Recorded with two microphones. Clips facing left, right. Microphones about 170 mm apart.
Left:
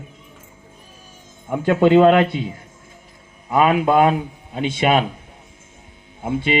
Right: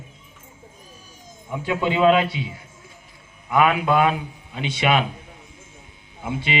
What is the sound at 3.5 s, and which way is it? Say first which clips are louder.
A man's voice: left 3 dB; 35° left (ahead or behind).